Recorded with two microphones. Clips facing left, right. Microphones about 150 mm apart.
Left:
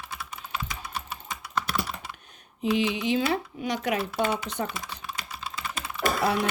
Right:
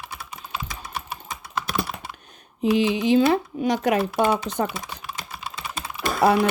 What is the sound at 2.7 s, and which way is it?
Speech, 35° right (ahead or behind).